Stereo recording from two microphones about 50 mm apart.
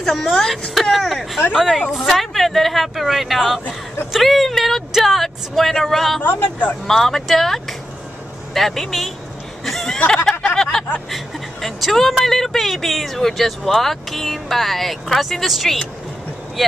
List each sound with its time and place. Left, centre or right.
0.0 s speech: centre
6.2 s speech: left
6.9 s speech: centre
9.7 s a sound: centre
11.1 s speech: centre